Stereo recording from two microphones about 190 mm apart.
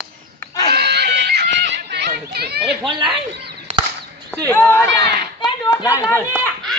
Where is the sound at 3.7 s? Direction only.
35° right (ahead or behind).